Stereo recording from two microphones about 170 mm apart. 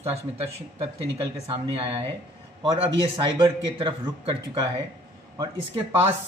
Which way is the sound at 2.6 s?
30° right (ahead or behind).